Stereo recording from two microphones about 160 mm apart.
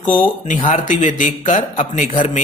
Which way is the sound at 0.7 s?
50° left (ahead or behind).